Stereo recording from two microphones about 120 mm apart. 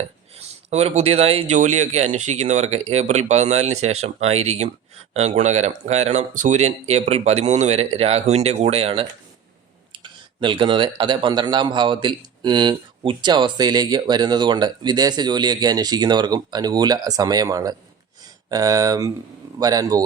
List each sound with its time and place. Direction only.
0.3 s speech: 60° right (ahead or behind)
1.5 s speech: 85° right; by 20.1 s 35° right (ahead or behind)